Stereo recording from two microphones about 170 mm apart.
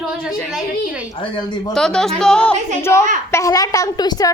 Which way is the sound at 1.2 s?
25° left (ahead or behind).